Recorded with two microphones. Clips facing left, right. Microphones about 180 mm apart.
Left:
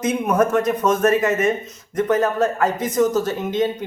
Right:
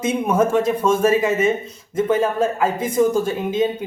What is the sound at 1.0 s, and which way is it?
Speech, 10° right (ahead or behind).